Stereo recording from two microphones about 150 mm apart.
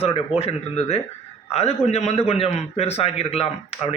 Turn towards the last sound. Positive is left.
turn(degrees=40)  # may be behind; listen again after turning